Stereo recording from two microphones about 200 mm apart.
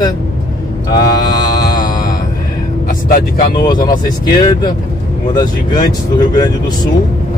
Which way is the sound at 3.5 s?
20° left (ahead or behind).